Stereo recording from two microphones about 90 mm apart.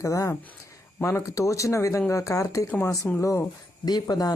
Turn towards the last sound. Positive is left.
turn(degrees=45)  # may be behind; listen again after turning